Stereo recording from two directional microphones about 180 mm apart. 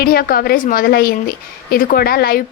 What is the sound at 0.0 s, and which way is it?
A woman's voice, 55° left (ahead or behind).